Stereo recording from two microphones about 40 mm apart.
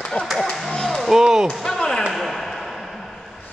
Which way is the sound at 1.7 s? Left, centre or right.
Centre.